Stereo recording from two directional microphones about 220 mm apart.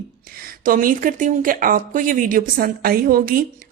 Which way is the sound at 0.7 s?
40° right (ahead or behind).